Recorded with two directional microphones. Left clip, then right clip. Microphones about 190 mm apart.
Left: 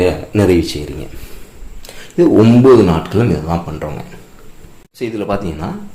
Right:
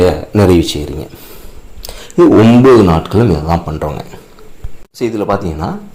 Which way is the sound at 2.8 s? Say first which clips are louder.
Right 4 dB; 30° right (ahead or behind).